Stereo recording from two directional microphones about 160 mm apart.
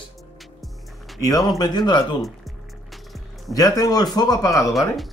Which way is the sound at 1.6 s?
25° left (ahead or behind).